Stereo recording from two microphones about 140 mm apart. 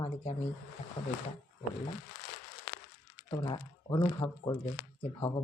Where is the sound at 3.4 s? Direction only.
30° left (ahead or behind).